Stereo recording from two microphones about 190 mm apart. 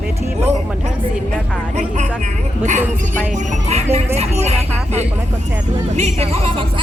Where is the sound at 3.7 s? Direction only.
35° right (ahead or behind).